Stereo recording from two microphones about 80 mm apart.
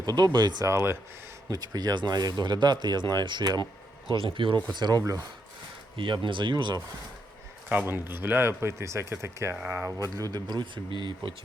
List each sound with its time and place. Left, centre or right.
0.0 s speech: right
0.6 s speech: right
1.5 s speech: right
4.4 s speech: right
4.7 s speech: right
6.0 s speech: right
7.7 s speech: right
9.6 s speech: right
10.3 s speech: right